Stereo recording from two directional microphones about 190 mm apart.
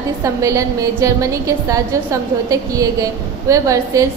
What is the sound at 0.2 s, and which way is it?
A woman's voice, 15° right (ahead or behind).